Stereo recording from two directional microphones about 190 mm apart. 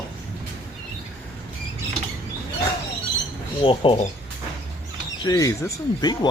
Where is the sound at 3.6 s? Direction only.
25° left (ahead or behind).